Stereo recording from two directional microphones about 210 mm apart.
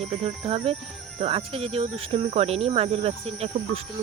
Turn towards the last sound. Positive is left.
turn(degrees=-30)  # may be behind; listen again after turning